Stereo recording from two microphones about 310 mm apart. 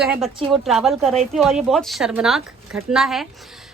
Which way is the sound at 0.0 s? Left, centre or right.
Centre.